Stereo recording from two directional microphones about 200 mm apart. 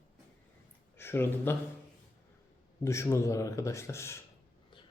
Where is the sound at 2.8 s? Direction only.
15° left (ahead or behind).